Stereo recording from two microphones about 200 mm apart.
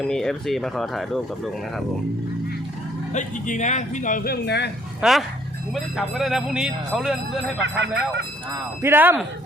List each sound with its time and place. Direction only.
0.0 s speech: centre (ahead or behind)
3.1 s speech: 40° left (ahead or behind); by 4.7 s 55° left (ahead or behind)
4.9 s speech: centre (ahead or behind)
7.6 s speech: 65° right (ahead or behind)
8.8 s speech: 10° right (ahead or behind)